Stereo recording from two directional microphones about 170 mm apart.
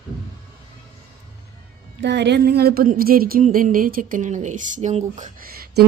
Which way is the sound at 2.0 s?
90° right.